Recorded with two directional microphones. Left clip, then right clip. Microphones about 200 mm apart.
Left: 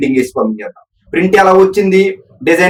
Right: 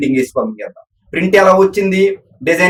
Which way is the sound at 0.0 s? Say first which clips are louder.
Left 2 dB; 20° right (ahead or behind).